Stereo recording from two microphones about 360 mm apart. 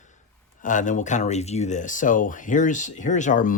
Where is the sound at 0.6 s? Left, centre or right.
Left.